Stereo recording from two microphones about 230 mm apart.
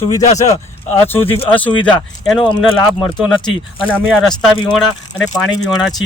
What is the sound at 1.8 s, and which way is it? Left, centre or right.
Speech, centre.